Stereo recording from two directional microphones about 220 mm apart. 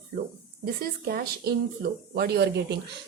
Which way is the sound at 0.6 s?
45° right (ahead or behind).